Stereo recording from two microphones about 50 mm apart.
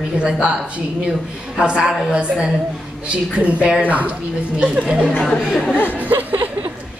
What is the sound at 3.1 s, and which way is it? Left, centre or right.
A woman's voice, right.